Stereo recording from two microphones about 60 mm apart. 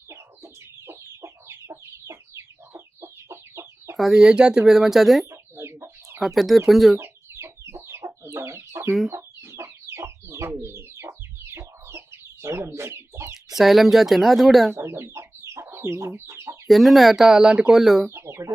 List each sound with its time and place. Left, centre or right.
0.1 s chicken: right
3.9 s speech: centre
4.2 s speech: centre
5.2 s chicken: right
6.1 s speech: centre
7.0 s chicken: right
10.5 s bird: right
11.5 s chicken: right
13.6 s speech: centre
14.8 s chicken: right
16.6 s speech: centre
18.1 s chicken: right